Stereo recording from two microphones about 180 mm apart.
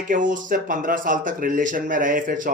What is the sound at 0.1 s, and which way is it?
A man's voice, 45° right (ahead or behind).